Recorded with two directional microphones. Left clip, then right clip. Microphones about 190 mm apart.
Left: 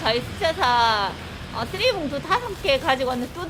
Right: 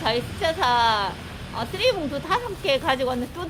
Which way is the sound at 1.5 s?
20° right (ahead or behind).